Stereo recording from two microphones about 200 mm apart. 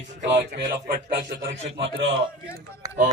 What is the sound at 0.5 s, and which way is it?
Speech, 55° right (ahead or behind).